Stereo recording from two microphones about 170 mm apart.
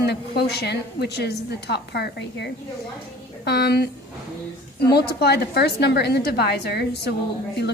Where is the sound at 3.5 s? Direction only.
75° left (ahead or behind).